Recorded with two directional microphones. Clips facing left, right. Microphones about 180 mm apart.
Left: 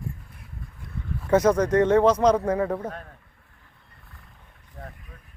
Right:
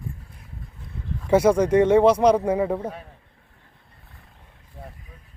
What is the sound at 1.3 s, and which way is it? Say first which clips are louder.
Speech: right 2 dB; 10° right (ahead or behind).